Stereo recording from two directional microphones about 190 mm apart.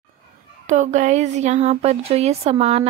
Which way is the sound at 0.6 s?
40° right (ahead or behind).